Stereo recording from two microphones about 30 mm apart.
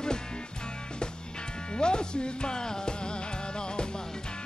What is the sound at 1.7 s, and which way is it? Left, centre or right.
Music, left.